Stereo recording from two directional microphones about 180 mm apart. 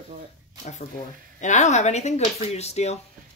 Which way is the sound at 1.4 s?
40° left (ahead or behind).